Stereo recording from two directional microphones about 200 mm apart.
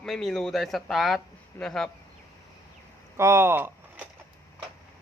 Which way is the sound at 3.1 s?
15° right (ahead or behind).